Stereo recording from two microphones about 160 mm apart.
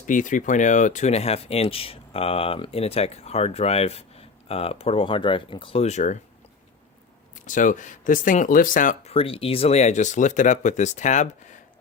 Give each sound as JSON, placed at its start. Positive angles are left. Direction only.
{"t": 0.0, "sound": "speech", "side_deg": 55}
{"t": 7.4, "sound": "speech", "side_deg": 55}
{"t": 9.0, "sound": "speech", "side_deg": 35}